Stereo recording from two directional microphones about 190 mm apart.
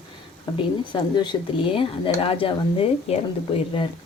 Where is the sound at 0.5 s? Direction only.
25° left (ahead or behind).